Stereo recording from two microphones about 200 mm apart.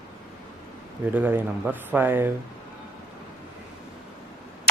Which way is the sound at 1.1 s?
10° right (ahead or behind).